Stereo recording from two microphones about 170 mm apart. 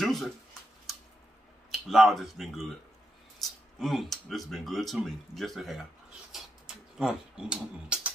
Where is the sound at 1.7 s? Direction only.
Centre (ahead or behind).